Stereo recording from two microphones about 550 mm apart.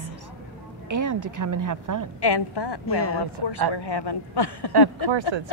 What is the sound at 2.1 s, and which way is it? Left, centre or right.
Speech, left.